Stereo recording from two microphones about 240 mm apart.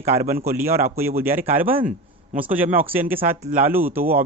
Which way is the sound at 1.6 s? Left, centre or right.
Right.